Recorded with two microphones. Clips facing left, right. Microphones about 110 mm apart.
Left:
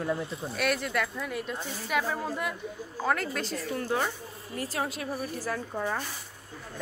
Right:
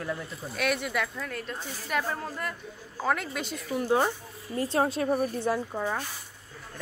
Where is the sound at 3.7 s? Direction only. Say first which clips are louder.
Right 6 dB; 20° right (ahead or behind).